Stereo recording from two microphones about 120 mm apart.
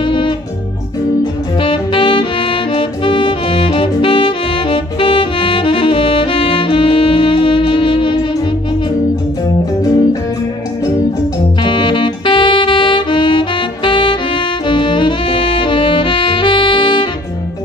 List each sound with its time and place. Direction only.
0.0 s music: 45° left (ahead or behind)
1.6 s saxophone: 45° left (ahead or behind)
11.6 s saxophone: 40° left (ahead or behind)